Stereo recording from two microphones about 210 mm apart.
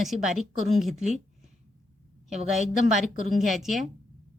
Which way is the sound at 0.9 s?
35° right (ahead or behind).